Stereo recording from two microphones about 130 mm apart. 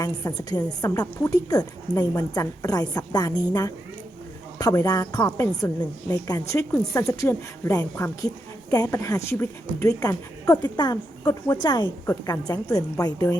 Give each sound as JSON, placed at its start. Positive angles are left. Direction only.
{"t": 0.0, "sound": "a woman's voice", "side_deg": 30}
{"t": 4.5, "sound": "a woman's voice", "side_deg": 20}